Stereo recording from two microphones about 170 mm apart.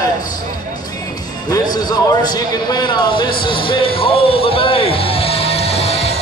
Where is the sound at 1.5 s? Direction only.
25° left (ahead or behind).